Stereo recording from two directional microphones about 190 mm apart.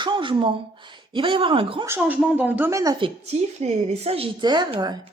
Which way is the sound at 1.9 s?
10° right (ahead or behind).